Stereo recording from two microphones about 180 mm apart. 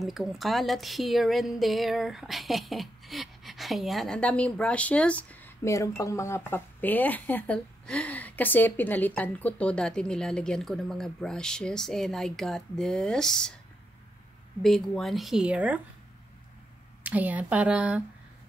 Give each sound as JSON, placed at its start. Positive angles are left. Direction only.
{"t": 0.0, "sound": "speech", "side_deg": 0}
{"t": 14.6, "sound": "speech", "side_deg": 0}
{"t": 17.0, "sound": "speech", "side_deg": -10}